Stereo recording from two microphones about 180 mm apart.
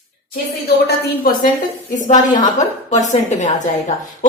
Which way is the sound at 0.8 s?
60° left (ahead or behind).